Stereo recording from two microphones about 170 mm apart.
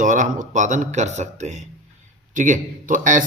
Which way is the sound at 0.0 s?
50° right (ahead or behind).